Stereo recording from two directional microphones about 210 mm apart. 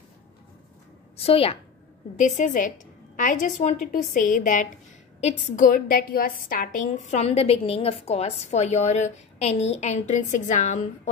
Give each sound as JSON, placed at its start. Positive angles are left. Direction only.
{"t": 1.1, "sound": "a woman's voice", "side_deg": 30}